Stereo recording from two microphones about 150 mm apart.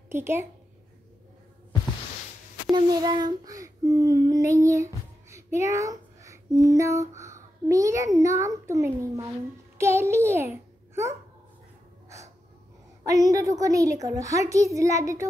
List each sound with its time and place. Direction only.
0.1 s a woman's voice: 15° right (ahead or behind)
2.7 s child singing: 25° right (ahead or behind)
9.8 s a child's voice: 15° right (ahead or behind)
13.0 s a woman's voice: 25° right (ahead or behind)